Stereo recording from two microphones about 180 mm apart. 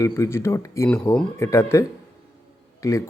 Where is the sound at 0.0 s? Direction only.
15° left (ahead or behind).